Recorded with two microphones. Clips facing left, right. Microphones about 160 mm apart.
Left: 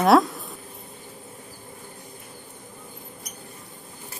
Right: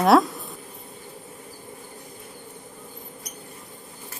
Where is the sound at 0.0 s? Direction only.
Centre (ahead or behind).